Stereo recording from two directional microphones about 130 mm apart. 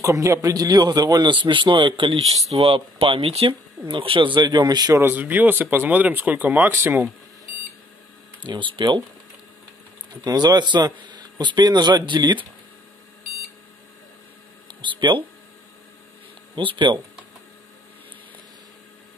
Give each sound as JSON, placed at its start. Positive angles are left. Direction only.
{"t": 0.0, "sound": "a man's voice", "side_deg": -25}
{"t": 5.0, "sound": "speech", "side_deg": -15}
{"t": 8.5, "sound": "speech", "side_deg": -40}
{"t": 10.2, "sound": "speech", "side_deg": -30}
{"t": 14.8, "sound": "speech", "side_deg": -40}
{"t": 16.5, "sound": "speech", "side_deg": -40}